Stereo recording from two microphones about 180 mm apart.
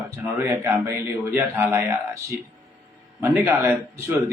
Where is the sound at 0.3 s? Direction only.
15° right (ahead or behind).